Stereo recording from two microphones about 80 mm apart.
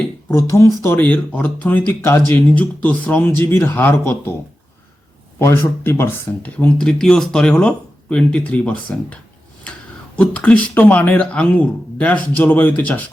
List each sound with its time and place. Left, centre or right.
0.3 s speech: left
0.9 s speech: centre
5.4 s speech: left
6.4 s speech: centre
10.2 s speech: centre